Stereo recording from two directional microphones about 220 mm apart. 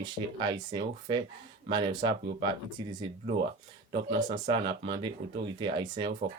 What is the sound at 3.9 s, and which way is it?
Speech, 25° right (ahead or behind).